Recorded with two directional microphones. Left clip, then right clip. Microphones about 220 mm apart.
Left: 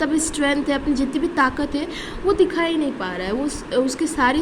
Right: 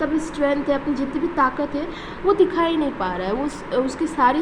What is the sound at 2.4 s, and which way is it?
A woman's voice, 15° left (ahead or behind).